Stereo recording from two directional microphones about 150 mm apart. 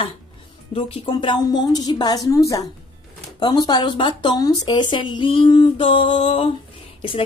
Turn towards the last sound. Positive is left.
turn(degrees=35)  # may be behind; listen again after turning